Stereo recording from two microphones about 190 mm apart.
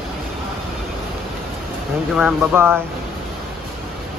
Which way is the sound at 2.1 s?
5° right (ahead or behind).